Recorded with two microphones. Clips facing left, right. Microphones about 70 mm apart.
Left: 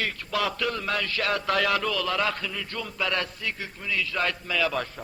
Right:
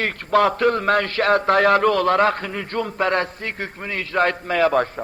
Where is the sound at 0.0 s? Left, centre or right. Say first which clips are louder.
Right 10 dB; right.